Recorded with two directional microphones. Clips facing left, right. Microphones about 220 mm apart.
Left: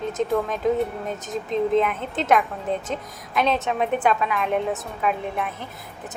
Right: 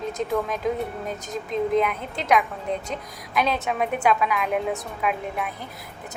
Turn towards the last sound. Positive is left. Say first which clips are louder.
# left 2 dB
turn(degrees=0)  # may be behind; listen again after turning